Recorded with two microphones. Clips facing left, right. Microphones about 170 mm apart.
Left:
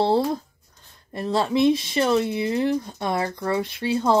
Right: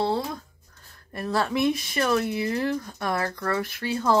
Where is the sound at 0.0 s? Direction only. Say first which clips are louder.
Left 6 dB; 30° left (ahead or behind).